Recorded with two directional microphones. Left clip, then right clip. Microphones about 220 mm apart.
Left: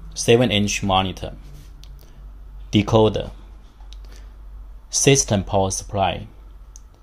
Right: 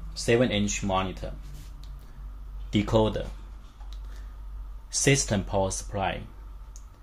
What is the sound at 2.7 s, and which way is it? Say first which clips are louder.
Speech: left 8 dB; 25° left (ahead or behind).